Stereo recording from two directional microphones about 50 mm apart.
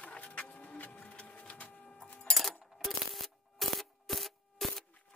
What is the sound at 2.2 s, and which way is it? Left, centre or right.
Music, centre.